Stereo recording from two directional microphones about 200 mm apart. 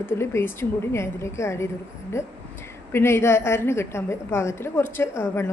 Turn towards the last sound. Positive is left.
turn(degrees=15)  # may be behind; listen again after turning